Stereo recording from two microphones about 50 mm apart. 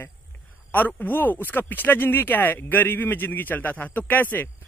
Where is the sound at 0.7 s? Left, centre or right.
Left.